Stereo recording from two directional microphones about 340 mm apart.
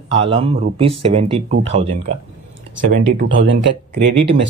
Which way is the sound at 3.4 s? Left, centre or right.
Right.